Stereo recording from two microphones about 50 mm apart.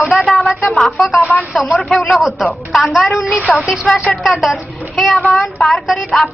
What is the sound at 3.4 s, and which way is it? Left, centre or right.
Speech, right.